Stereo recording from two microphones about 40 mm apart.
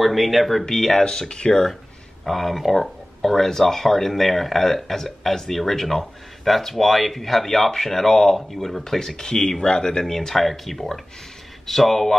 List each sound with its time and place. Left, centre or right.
0.0 s speech: centre
0.7 s speech: centre
2.2 s speech: centre